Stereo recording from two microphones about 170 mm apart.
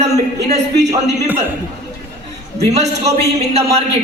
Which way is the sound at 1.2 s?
10° right (ahead or behind).